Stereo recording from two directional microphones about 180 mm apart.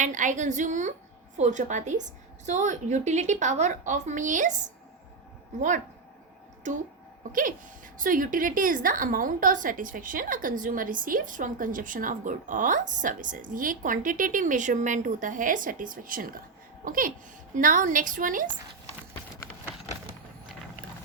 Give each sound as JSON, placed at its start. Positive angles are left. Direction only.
{"t": 0.0, "sound": "a woman's voice", "side_deg": -45}
{"t": 7.9, "sound": "a woman's voice", "side_deg": -50}